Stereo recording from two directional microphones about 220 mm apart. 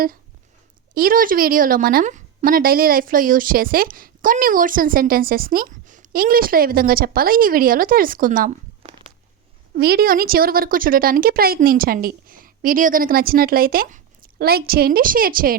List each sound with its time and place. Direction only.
0.9 s a woman's voice: 40° right (ahead or behind)
9.7 s a woman's voice: 45° right (ahead or behind)